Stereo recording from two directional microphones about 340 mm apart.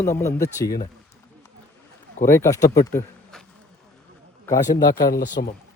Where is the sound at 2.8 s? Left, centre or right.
Centre.